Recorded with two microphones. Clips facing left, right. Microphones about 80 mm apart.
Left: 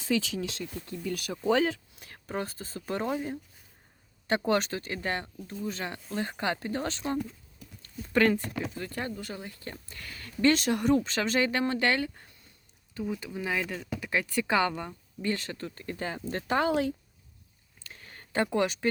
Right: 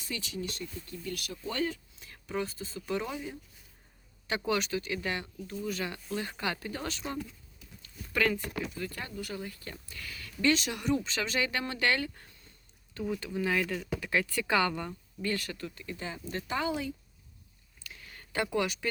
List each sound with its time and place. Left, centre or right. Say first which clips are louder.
0.1 s speech: left 8 dB; left
4.4 s speech: even; left
7.6 s a sound: left 7 dB; left
8.6 s speech: left 3 dB; left
12.9 s speech: even; centre; by 16.9 s left
17.8 s a sound: left 1 dB; left